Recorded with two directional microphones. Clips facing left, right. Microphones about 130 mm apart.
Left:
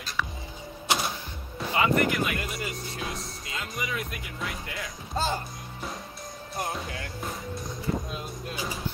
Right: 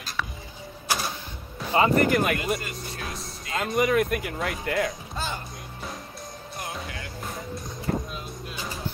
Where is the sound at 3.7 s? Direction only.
55° right (ahead or behind).